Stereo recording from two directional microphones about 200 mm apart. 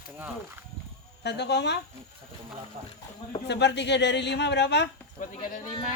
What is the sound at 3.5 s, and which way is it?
A woman's voice, 60° left (ahead or behind).